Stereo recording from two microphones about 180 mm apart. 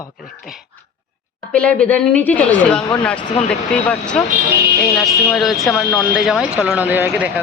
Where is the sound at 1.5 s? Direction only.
5° left (ahead or behind).